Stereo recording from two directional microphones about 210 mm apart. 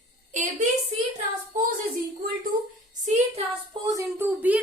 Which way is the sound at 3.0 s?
35° right (ahead or behind).